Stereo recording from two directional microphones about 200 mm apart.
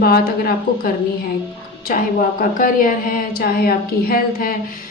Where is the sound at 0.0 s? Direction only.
50° left (ahead or behind).